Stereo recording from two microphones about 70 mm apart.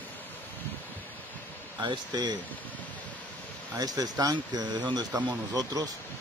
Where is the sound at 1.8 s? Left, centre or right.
Right.